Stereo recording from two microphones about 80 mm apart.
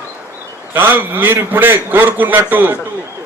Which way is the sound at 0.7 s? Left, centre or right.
Right.